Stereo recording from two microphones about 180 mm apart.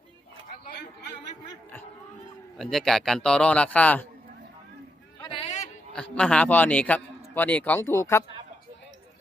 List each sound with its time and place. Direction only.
2.6 s a man's voice: centre (ahead or behind)
5.3 s a sound: 35° left (ahead or behind)
5.9 s a man's voice: 5° left (ahead or behind)